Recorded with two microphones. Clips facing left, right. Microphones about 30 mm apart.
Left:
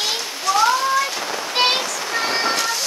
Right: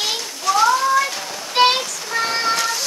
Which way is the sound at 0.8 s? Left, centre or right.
Centre.